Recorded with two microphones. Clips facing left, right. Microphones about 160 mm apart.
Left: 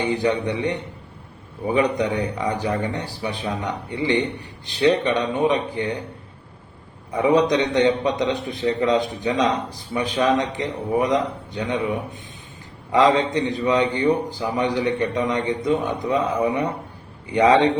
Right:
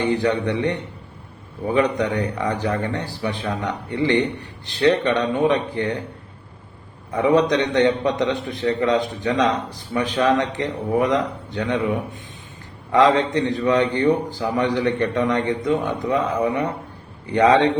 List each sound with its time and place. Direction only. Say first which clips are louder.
0.0 s a man's voice: right 1 dB; 15° left (ahead or behind)
7.1 s a man's voice: even; 10° left (ahead or behind)
12.9 s a man's voice: right 1 dB; 15° left (ahead or behind)